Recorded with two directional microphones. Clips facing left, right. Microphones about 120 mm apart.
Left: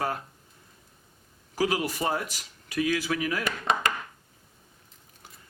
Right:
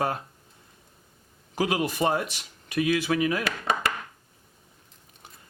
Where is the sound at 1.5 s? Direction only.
25° right (ahead or behind).